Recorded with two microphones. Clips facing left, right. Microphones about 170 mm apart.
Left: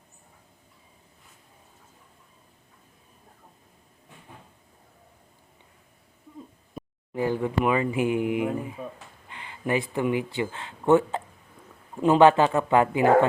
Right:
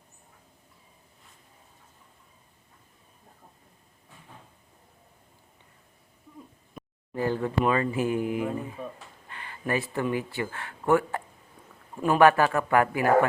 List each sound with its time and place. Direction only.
7.1 s speech: 15° left (ahead or behind)